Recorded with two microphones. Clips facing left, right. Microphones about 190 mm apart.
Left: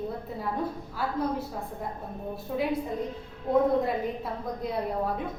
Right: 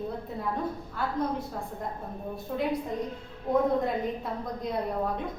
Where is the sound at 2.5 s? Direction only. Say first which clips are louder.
Left 1 dB; centre (ahead or behind).